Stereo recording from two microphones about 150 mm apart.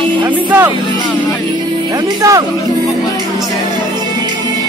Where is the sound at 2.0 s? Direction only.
20° right (ahead or behind).